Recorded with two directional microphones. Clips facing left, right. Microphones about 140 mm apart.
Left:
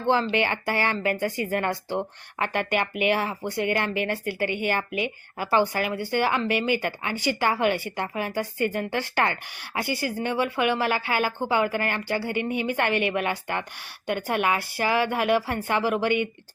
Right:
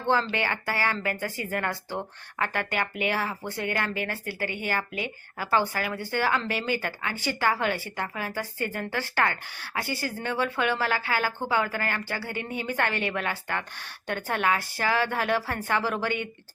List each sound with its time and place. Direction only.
0.1 s speech: 20° left (ahead or behind)